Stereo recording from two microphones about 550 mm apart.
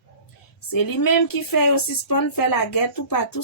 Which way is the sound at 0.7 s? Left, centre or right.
Left.